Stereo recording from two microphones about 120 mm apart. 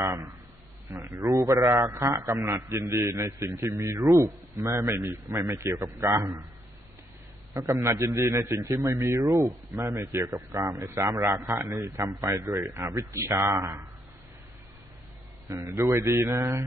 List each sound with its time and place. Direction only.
0.0 s a man's voice: 25° right (ahead or behind)
7.5 s a man's voice: 25° right (ahead or behind)
15.4 s a man's voice: 25° right (ahead or behind)